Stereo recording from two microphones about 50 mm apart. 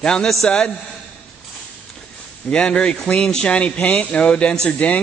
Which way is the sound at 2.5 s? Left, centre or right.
Centre.